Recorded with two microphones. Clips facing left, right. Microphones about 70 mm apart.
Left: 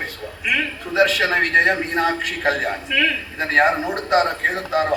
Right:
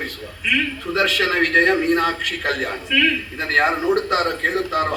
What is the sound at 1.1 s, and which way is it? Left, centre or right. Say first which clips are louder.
A man's voice: even; left.